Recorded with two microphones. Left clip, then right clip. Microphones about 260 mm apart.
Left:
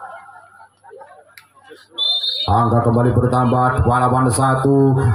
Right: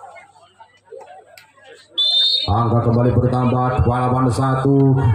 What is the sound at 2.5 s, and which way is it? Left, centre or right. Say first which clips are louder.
Speech: left 3 dB; left.